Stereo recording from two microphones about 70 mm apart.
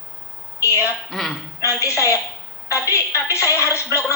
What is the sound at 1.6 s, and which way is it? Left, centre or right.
Speech, left.